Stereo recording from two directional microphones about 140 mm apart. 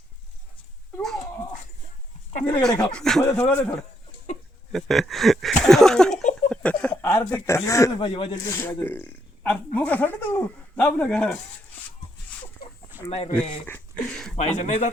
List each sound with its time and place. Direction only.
2.4 s speech: 10° left (ahead or behind)
4.7 s speech: centre (ahead or behind)
6.5 s a sound: 10° left (ahead or behind)
7.0 s speech: 15° left (ahead or behind)
7.9 s speech: 40° left (ahead or behind)
8.4 s speech: 20° left (ahead or behind)
12.6 s chicken: 90° left
13.1 s speech: 50° left (ahead or behind)
13.7 s speech: 10° left (ahead or behind)
14.3 s speech: 55° left (ahead or behind)